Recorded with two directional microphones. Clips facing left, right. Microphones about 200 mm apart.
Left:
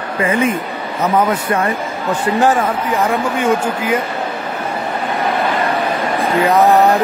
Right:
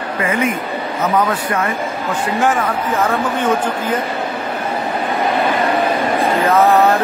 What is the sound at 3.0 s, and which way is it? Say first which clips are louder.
Speech: left 1 dB; 10° left (ahead or behind).